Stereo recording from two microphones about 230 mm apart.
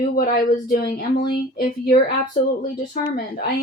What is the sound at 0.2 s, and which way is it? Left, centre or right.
Speech, left.